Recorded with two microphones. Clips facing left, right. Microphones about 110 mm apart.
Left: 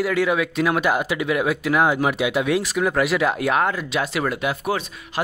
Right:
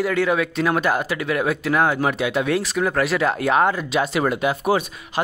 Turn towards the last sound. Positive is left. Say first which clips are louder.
# right 4 dB
turn(degrees=-5)  # may be behind; listen again after turning